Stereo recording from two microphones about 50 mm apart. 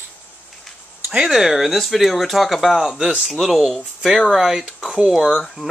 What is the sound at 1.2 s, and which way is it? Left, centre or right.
Speech, centre.